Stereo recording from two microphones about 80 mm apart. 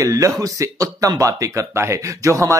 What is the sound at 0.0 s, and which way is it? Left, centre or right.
Speech, right.